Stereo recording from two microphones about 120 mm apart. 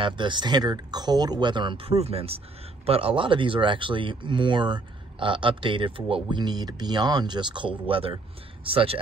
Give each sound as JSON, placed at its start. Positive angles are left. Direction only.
{"t": 0.0, "sound": "speech", "side_deg": -40}